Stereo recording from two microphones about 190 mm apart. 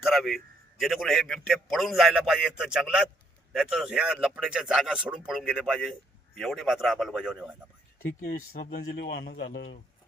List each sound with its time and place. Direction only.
0.0 s a man's voice: centre (ahead or behind)
8.0 s speech: 50° left (ahead or behind)